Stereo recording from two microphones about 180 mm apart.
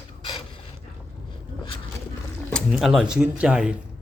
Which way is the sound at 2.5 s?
Centre (ahead or behind).